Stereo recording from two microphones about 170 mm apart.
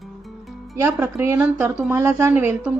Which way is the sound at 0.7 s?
15° right (ahead or behind).